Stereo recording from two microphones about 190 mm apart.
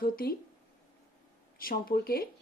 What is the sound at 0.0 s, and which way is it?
Speech, 50° left (ahead or behind).